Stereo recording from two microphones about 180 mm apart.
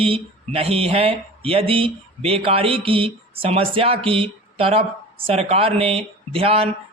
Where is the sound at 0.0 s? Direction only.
30° right (ahead or behind).